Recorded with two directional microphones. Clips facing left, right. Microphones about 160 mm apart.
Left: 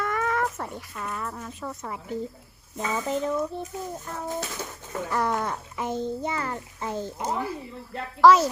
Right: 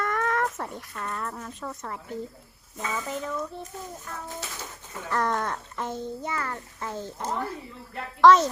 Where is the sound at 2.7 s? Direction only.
25° left (ahead or behind).